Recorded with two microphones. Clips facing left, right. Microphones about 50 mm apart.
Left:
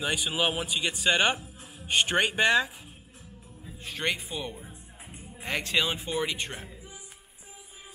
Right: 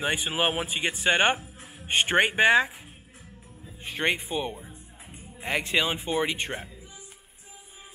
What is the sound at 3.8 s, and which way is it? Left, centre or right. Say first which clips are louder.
A man's voice: right 4 dB; right.